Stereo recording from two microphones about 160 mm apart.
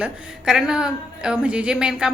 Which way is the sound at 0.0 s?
5° right (ahead or behind).